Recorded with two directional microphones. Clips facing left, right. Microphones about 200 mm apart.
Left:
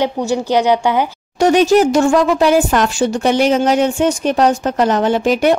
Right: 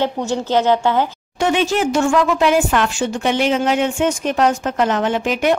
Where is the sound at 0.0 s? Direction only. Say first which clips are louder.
Left 3 dB; 10° left (ahead or behind).